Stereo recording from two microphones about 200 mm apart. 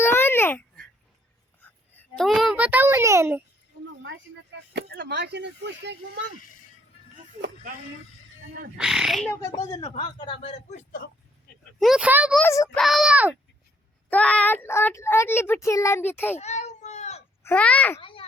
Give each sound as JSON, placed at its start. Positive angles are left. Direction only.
{"t": 0.0, "sound": "babbling", "side_deg": 10}
{"t": 2.0, "sound": "a child's voice", "side_deg": 0}
{"t": 4.7, "sound": "speech", "side_deg": -55}
{"t": 8.8, "sound": "speech", "side_deg": -5}
{"t": 9.7, "sound": "speech", "side_deg": 25}
{"t": 11.8, "sound": "speech", "side_deg": -5}
{"t": 12.4, "sound": "a child's voice", "side_deg": 15}
{"t": 12.7, "sound": "speech", "side_deg": 0}
{"t": 14.1, "sound": "a child's voice", "side_deg": 5}
{"t": 16.4, "sound": "a sound", "side_deg": 35}
{"t": 17.4, "sound": "speech", "side_deg": 5}
{"t": 18.0, "sound": "a sound", "side_deg": 25}